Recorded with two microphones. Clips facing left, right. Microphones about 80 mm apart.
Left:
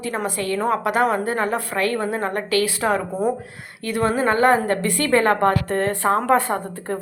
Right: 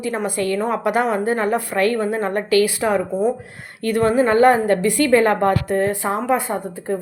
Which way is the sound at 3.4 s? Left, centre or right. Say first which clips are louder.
Right 5 dB; right.